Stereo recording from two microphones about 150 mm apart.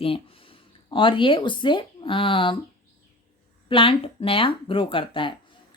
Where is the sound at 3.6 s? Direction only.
35° left (ahead or behind).